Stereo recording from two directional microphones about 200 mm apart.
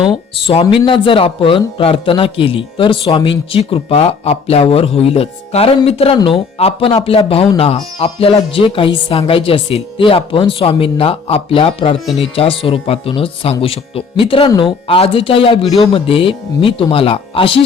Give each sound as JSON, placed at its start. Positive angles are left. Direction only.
{"t": 0.0, "sound": "speech", "side_deg": 25}